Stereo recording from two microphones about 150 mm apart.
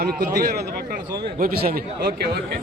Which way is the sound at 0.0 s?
90° right.